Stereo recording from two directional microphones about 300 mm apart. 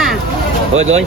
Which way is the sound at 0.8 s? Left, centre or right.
Right.